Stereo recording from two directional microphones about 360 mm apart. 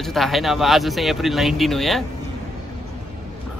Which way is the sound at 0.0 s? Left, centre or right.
Centre.